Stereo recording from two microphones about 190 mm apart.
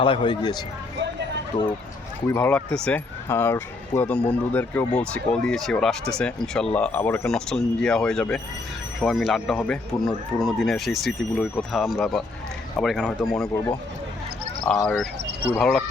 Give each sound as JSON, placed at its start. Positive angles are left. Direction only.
{"t": 0.0, "sound": "speech", "side_deg": 25}
{"t": 2.2, "sound": "speech", "side_deg": 10}